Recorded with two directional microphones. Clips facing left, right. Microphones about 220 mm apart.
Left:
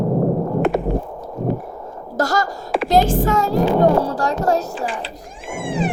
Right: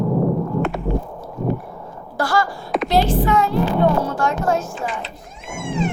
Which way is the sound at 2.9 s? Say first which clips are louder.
Left 2 dB; 45° left (ahead or behind).